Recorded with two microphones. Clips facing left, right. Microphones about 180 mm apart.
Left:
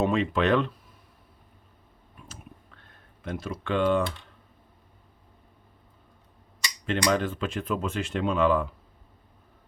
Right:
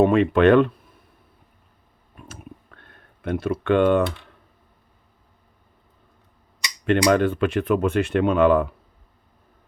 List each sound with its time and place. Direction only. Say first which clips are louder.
0.0 s speech: right 9 dB; 60° right (ahead or behind)
2.1 s a sound: right 6 dB; 60° right (ahead or behind)
6.8 s speech: right 8 dB; 60° right (ahead or behind)